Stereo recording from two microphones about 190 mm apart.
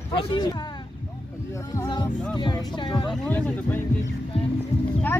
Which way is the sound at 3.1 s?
5° left (ahead or behind).